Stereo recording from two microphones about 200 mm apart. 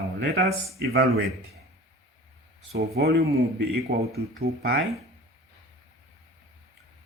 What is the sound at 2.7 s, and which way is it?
Speech, 50° right (ahead or behind).